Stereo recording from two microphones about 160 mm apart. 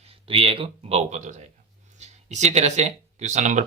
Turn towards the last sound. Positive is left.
turn(degrees=-50)  # may be behind; listen again after turning